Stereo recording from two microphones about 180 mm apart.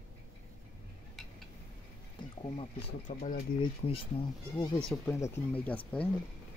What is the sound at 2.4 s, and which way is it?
Speech, 30° left (ahead or behind).